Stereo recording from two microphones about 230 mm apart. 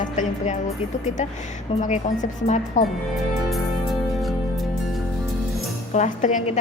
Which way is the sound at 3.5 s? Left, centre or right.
Centre.